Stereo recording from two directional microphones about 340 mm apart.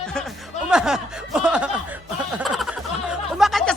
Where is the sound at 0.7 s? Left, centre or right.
Centre.